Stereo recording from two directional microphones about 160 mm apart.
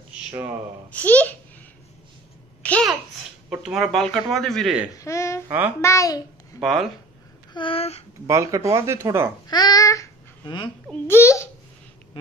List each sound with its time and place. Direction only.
0.9 s a child's voice: 10° left (ahead or behind)
2.6 s babbling: 10° left (ahead or behind)
3.4 s speech: 5° right (ahead or behind)
4.9 s a child's voice: 20° left (ahead or behind)
6.6 s speech: centre (ahead or behind)
7.5 s a sound: 35° left (ahead or behind)
8.3 s speech: 20° right (ahead or behind)
9.5 s speech: 25° left (ahead or behind)
10.9 s a child's voice: 15° left (ahead or behind)